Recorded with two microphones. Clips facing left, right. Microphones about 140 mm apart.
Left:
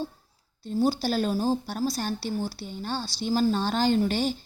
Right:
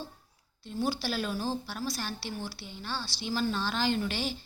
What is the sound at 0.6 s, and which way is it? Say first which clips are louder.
A woman's voice: left 7 dB; 40° left (ahead or behind).